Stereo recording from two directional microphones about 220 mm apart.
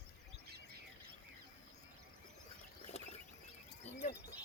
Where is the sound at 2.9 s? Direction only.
30° left (ahead or behind).